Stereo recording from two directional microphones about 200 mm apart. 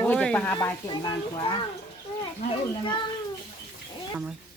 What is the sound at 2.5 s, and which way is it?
Speech, 25° left (ahead or behind).